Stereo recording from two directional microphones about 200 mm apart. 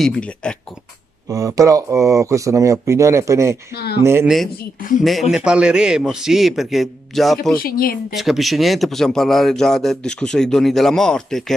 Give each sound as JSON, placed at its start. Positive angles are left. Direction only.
{"t": 0.0, "sound": "speech", "side_deg": 5}
{"t": 1.3, "sound": "speech", "side_deg": -15}
{"t": 3.7, "sound": "speech", "side_deg": 55}
{"t": 4.0, "sound": "speech", "side_deg": -10}
{"t": 5.3, "sound": "speech", "side_deg": -5}
{"t": 7.5, "sound": "speech", "side_deg": 45}
{"t": 8.1, "sound": "speech", "side_deg": 0}